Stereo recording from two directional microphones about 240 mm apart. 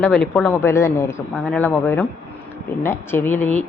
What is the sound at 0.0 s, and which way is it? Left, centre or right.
Speech, centre.